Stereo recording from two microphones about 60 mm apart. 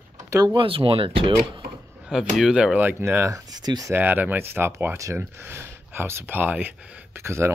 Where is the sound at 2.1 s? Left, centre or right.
Centre.